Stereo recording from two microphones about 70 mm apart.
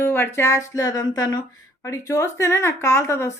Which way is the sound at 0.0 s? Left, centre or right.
Left.